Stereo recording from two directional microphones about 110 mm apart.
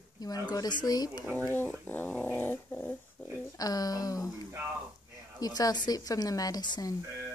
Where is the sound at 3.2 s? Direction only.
10° left (ahead or behind).